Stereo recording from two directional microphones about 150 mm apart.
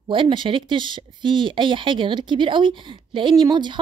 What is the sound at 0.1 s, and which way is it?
A woman's voice, 35° right (ahead or behind).